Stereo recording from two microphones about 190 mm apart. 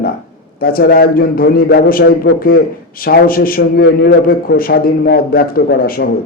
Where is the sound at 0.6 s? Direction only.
50° left (ahead or behind).